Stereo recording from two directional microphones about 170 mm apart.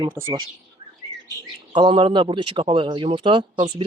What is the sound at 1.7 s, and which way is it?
Speech, 30° right (ahead or behind).